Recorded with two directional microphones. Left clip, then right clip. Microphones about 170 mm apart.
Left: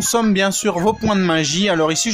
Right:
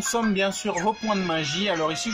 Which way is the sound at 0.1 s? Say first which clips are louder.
Left 7 dB; 55° left (ahead or behind).